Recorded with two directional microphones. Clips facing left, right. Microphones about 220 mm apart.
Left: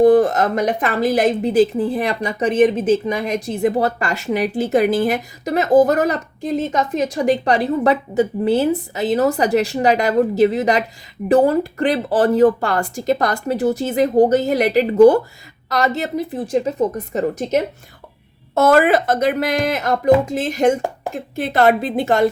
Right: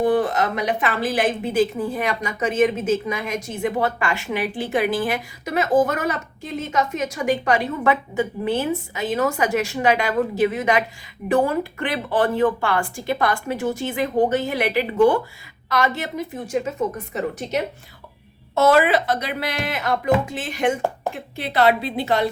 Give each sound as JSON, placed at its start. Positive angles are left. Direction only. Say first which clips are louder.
{"t": 0.0, "sound": "a woman's voice", "louder": "left 7 dB", "side_deg": 45}